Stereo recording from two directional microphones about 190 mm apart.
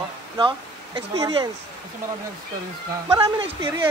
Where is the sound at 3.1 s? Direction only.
20° right (ahead or behind).